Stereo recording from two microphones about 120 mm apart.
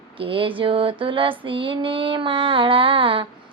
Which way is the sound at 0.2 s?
45° right (ahead or behind).